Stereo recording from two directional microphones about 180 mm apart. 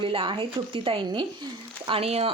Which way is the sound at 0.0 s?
30° right (ahead or behind).